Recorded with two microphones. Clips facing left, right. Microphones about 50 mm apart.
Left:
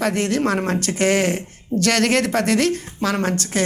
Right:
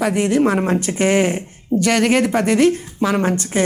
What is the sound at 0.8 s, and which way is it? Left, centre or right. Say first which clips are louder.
Speech: right 2 dB; centre.